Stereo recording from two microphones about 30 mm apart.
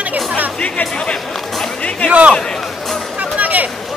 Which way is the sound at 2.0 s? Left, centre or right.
Right.